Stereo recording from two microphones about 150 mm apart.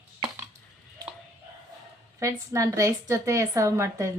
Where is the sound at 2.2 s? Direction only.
20° right (ahead or behind).